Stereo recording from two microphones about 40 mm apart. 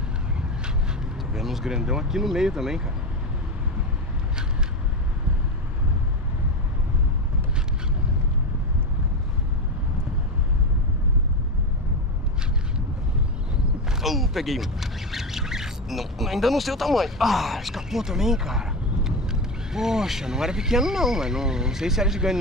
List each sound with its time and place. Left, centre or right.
1.3 s speech: centre
14.0 s speech: centre